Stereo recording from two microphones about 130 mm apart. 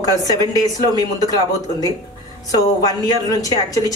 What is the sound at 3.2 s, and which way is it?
Speech, 25° left (ahead or behind).